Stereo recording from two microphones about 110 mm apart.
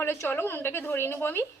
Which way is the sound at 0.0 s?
20° left (ahead or behind).